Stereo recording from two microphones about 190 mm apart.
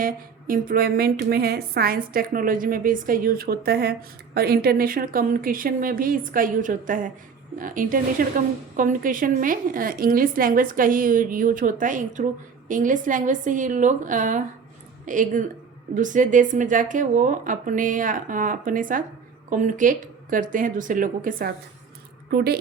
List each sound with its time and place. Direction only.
0.0 s a woman's voice: 45° right (ahead or behind)